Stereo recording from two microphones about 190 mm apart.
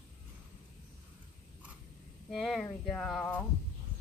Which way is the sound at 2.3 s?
Centre (ahead or behind).